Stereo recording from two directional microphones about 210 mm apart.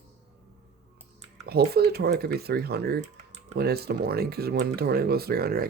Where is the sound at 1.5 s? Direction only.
50° right (ahead or behind).